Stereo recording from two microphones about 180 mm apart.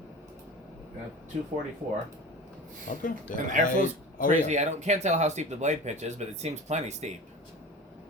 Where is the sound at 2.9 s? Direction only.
45° left (ahead or behind).